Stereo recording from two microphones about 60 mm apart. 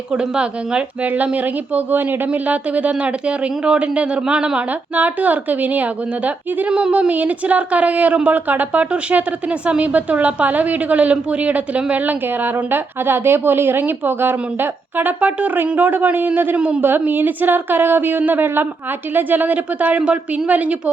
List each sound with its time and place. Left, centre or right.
0.1 s speech: centre
1.0 s a woman's voice: right
4.7 s a woman's voice: right
7.1 s a woman's voice: right
16.6 s speech: centre
17.1 s a woman's voice: right